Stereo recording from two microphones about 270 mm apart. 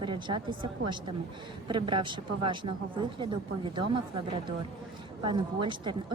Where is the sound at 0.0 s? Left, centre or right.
Centre.